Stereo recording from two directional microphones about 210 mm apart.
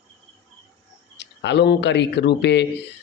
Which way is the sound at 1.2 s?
55° left (ahead or behind).